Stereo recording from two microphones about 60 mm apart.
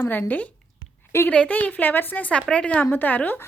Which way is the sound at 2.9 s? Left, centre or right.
Left.